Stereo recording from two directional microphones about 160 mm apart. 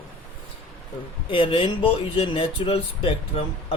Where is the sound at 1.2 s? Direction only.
35° left (ahead or behind).